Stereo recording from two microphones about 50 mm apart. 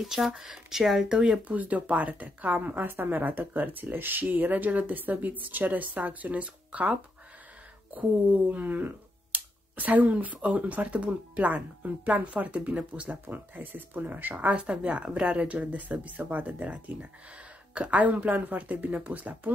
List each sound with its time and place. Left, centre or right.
0.0 s speech: centre
0.3 s speech: centre
1.1 s speech: centre
1.5 s speech: right
13.6 s speech: right
14.6 s speech: right